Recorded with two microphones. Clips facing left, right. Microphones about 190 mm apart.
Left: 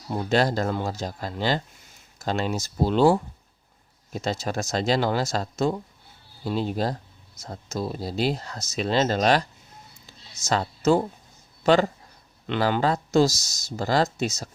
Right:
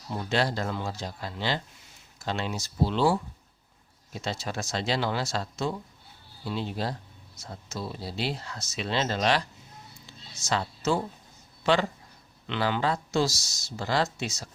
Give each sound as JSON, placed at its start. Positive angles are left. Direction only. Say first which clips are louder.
{"t": 0.1, "sound": "speech", "louder": "left 5 dB", "side_deg": 45}
{"t": 10.1, "sound": "a sound", "louder": "left 4 dB", "side_deg": 45}
{"t": 11.6, "sound": "speech", "louder": "left 5 dB", "side_deg": 45}